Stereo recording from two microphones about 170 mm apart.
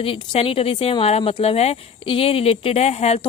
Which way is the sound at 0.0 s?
35° left (ahead or behind).